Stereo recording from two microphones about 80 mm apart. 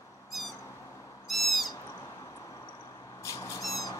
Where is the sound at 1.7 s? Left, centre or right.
Left.